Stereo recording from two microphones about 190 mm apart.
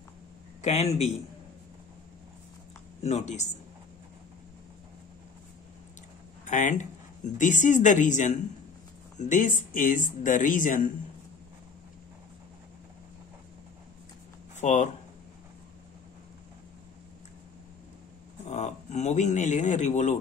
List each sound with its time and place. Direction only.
0.6 s a man's voice: 35° left (ahead or behind)
3.0 s speech: 35° left (ahead or behind)
6.4 s speech: 40° left (ahead or behind)
14.6 s speech: 40° left (ahead or behind)
18.5 s speech: 35° left (ahead or behind)